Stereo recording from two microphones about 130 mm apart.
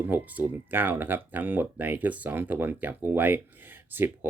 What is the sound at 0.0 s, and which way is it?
Speech, 15° right (ahead or behind).